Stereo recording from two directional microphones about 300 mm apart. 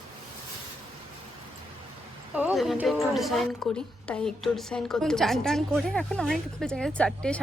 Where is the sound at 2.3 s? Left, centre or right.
Centre.